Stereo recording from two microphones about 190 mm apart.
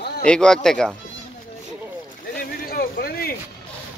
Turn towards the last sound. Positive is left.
turn(degrees=55)  # may be behind; listen again after turning